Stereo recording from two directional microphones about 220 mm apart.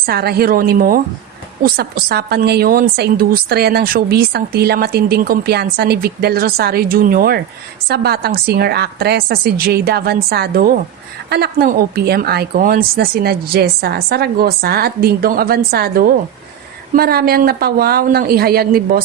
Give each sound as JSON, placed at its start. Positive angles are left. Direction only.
{"t": 0.0, "sound": "speech", "side_deg": -45}